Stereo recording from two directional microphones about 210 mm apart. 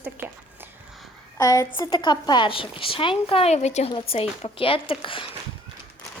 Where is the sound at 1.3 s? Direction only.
15° left (ahead or behind).